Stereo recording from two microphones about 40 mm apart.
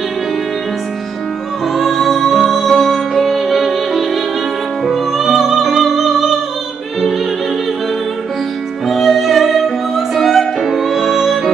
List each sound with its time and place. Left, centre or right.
1.8 s music: centre
8.8 s music: centre